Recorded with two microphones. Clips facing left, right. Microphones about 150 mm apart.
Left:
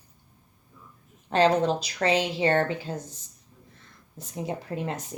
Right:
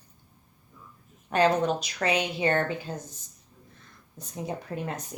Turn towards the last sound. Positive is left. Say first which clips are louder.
# left 2 dB
turn(degrees=25)  # may be behind; listen again after turning